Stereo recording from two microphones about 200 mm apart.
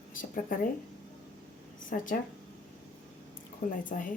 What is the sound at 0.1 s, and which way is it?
Speech, 45° left (ahead or behind).